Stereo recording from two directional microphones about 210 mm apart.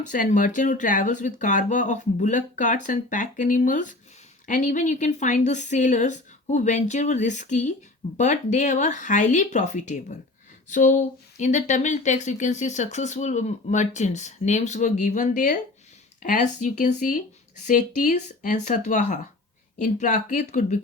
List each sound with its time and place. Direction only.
0.1 s speech: 35° left (ahead or behind)